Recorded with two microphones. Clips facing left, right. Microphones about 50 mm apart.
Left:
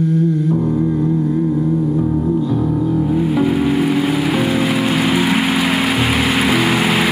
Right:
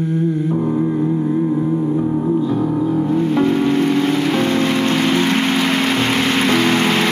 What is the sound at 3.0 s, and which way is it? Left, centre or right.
Music, centre.